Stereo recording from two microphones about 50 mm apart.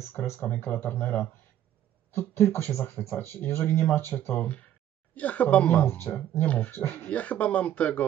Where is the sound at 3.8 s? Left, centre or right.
Left.